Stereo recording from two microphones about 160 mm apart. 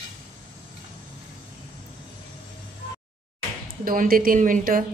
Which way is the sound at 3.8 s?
60° right (ahead or behind).